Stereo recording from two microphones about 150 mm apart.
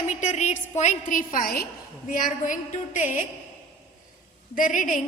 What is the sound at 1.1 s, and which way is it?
A woman's voice, 70° left (ahead or behind).